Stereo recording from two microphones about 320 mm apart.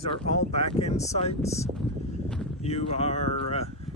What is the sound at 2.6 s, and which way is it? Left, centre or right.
Speech, centre.